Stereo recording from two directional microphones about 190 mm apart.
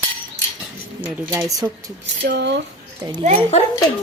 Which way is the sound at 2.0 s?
65° right (ahead or behind).